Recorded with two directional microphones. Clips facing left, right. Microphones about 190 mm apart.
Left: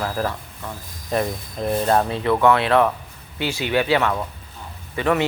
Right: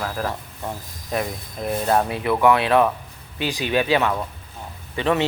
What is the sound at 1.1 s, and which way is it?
A man's voice, 5° right (ahead or behind).